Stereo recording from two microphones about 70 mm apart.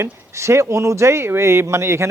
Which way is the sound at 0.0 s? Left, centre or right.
Right.